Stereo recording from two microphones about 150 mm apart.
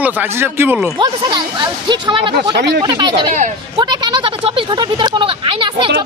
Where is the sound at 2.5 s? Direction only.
90° right.